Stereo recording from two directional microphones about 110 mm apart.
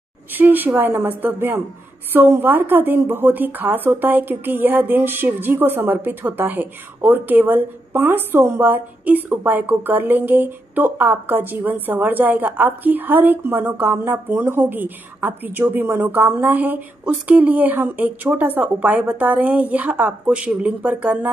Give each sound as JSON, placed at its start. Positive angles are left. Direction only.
{"t": 0.4, "sound": "a woman's voice", "side_deg": -15}